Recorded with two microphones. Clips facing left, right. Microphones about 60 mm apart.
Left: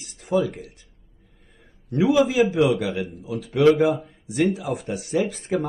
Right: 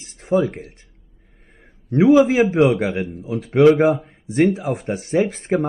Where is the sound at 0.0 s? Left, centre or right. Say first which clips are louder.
Right 4 dB; right.